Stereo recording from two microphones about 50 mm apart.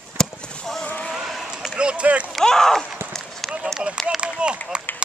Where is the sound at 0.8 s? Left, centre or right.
Left.